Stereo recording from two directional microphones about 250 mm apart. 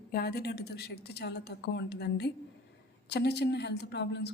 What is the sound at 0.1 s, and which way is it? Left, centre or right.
Speech, left.